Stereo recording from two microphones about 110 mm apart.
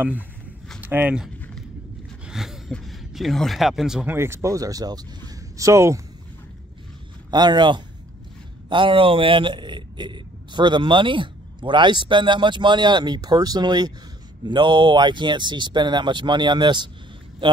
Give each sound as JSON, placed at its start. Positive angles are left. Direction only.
{"t": 0.7, "sound": "speech", "side_deg": -15}
{"t": 2.2, "sound": "a sound", "side_deg": -5}
{"t": 2.7, "sound": "speech", "side_deg": 0}
{"t": 4.1, "sound": "speech", "side_deg": -25}
{"t": 7.2, "sound": "speech", "side_deg": -40}